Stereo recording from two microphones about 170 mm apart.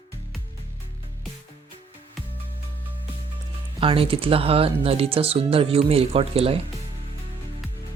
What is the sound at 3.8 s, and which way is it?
Speech, 30° right (ahead or behind).